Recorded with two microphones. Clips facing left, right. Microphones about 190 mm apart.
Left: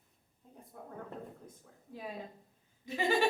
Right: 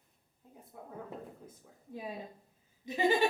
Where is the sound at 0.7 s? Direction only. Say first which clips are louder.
Even; 5° right (ahead or behind).